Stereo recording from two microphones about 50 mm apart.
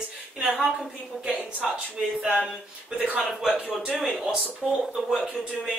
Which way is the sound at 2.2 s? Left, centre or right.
Centre.